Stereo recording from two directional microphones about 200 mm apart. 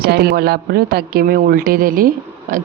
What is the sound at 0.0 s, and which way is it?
A woman's voice, 50° right (ahead or behind).